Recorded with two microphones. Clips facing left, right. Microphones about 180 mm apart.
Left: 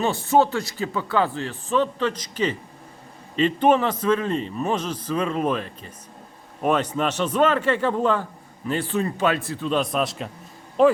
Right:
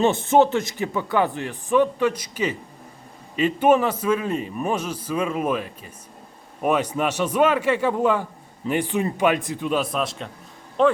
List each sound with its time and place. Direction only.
0.0 s a man's voice: 20° right (ahead or behind); by 10.9 s 5° left (ahead or behind)